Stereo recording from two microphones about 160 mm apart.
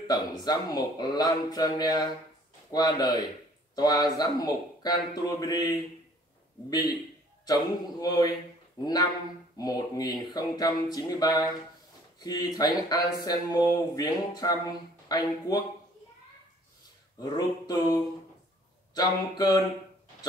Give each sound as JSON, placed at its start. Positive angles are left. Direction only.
{"t": 0.0, "sound": "speech", "side_deg": 25}
{"t": 9.6, "sound": "speech", "side_deg": 25}
{"t": 17.2, "sound": "speech", "side_deg": 25}